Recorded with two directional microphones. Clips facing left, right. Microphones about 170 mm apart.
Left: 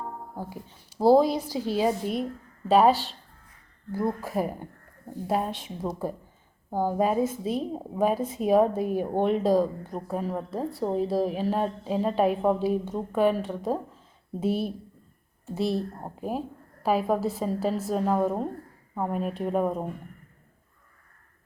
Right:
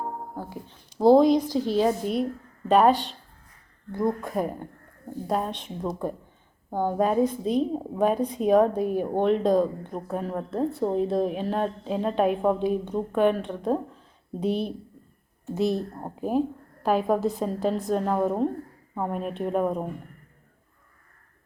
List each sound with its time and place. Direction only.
0.3 s a woman's voice: 10° left (ahead or behind)